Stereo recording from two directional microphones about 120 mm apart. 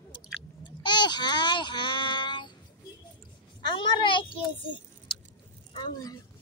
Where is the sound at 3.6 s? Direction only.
40° left (ahead or behind).